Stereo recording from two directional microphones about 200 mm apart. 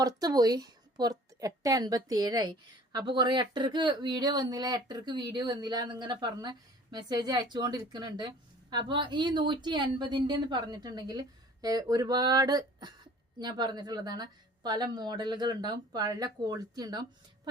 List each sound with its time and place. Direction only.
0.0 s a woman's voice: 20° right (ahead or behind)